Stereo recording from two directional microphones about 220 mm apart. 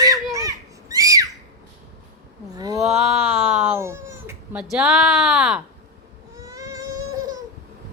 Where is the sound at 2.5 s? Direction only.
15° right (ahead or behind).